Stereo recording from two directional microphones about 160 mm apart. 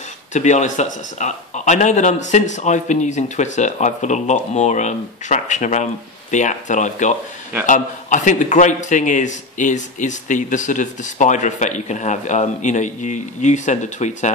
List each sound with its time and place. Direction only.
0.3 s a man's voice: 50° left (ahead or behind)